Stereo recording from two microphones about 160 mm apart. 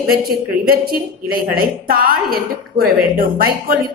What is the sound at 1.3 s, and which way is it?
A woman's voice, 65° right (ahead or behind).